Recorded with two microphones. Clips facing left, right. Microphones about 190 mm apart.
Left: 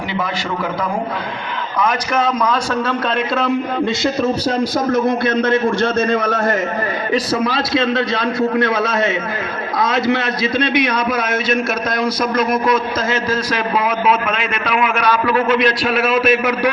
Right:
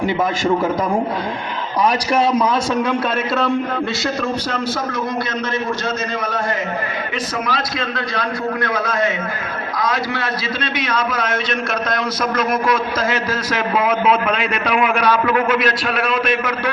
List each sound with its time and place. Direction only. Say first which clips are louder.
1.8 s a man's voice: right 1 dB; 30° right (ahead or behind)
4.2 s speech: left 5 dB; 30° left (ahead or behind)
5.2 s a man's voice: left 7 dB; 55° left (ahead or behind)
7.1 s a man's voice: left 7 dB; 30° left (ahead or behind); by 11.5 s 10° left (ahead or behind)
14.6 s a man's voice: even; 15° right (ahead or behind); by 16.6 s 10° left (ahead or behind)